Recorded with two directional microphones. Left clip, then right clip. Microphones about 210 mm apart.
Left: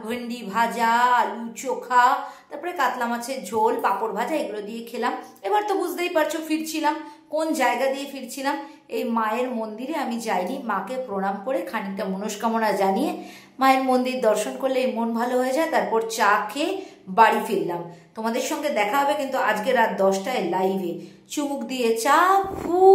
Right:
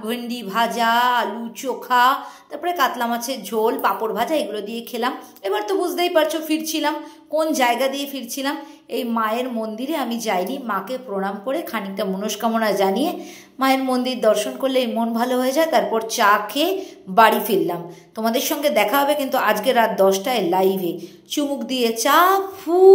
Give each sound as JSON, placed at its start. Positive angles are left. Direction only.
{"t": 0.0, "sound": "a woman's voice", "side_deg": -10}